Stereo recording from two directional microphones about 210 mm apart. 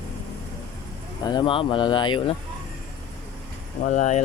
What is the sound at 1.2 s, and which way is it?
Speech, 20° left (ahead or behind).